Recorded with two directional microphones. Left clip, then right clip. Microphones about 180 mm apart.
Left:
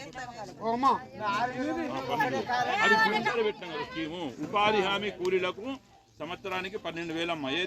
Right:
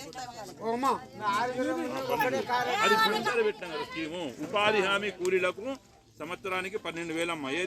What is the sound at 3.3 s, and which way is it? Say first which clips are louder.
Speech: right 1 dB; 50° left (ahead or behind).